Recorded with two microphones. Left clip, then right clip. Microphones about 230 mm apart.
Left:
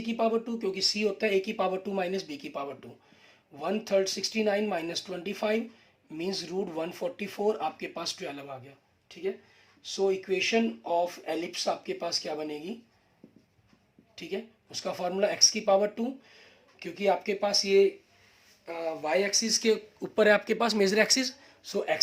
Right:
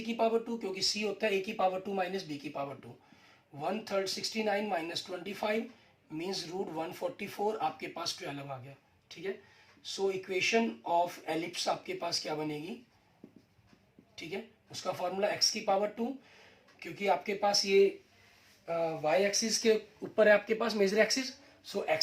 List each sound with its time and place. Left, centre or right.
0.1 s speech: left
9.8 s speech: left
14.2 s speech: left